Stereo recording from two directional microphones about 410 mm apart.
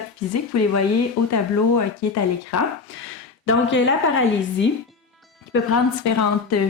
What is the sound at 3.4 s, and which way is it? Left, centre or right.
A woman's voice, left.